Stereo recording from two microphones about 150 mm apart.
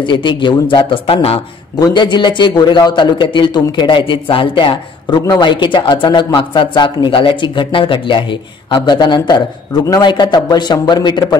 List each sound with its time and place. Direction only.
0.0 s a man's voice: 30° left (ahead or behind)